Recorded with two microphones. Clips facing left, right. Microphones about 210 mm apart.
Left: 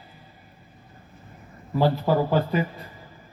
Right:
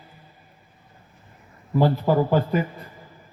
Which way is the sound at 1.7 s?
45° right (ahead or behind).